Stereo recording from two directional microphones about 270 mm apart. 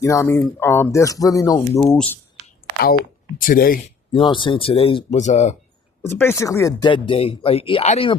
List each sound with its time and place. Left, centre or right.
0.0 s speech: centre
2.8 s speech: left
4.2 s speech: centre
6.0 s speech: centre